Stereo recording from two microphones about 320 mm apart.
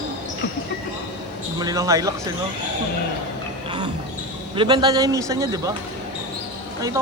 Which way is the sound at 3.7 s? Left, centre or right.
Centre.